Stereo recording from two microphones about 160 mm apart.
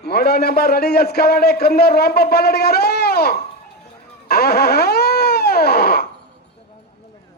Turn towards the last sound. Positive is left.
turn(degrees=75)  # may be behind; listen again after turning